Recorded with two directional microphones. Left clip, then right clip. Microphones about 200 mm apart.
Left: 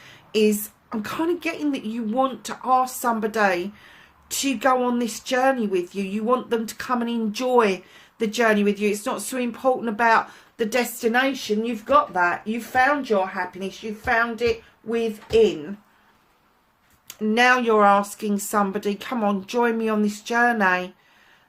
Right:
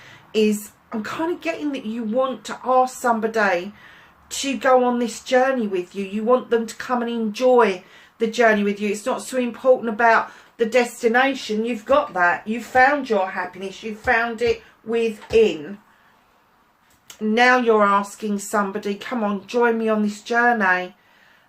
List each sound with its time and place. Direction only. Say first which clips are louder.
0.9 s speech: even; 50° left (ahead or behind)
17.1 s speech: right 2 dB; 50° left (ahead or behind)